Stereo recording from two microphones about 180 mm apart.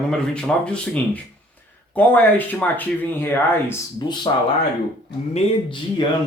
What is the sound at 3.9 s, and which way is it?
Speech, 25° left (ahead or behind).